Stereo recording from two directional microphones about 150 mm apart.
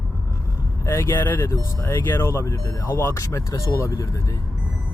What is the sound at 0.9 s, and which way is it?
Speech, 15° left (ahead or behind).